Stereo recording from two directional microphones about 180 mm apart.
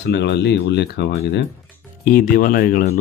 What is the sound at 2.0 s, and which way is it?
Speech, 50° left (ahead or behind).